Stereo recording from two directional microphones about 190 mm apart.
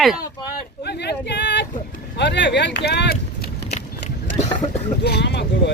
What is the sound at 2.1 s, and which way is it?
Speech, 65° left (ahead or behind).